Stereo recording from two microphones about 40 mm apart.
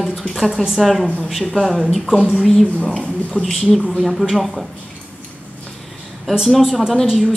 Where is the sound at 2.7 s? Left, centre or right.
Left.